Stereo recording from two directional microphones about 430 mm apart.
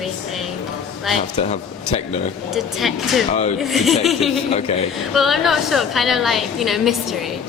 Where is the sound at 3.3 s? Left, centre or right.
Centre.